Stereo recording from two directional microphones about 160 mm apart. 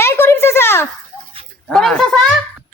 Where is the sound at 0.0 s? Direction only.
15° left (ahead or behind).